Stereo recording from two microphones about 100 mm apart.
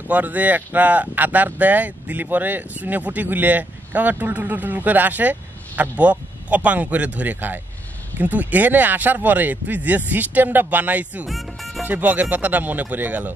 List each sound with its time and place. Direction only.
0.1 s speech: 15° right (ahead or behind)
11.2 s music: centre (ahead or behind)
11.8 s speech: 15° right (ahead or behind)